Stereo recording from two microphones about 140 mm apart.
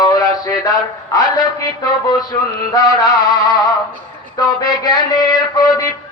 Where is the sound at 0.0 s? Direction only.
25° left (ahead or behind).